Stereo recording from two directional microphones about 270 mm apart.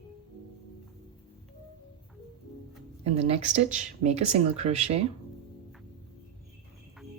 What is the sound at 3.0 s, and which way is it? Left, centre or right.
Speech, right.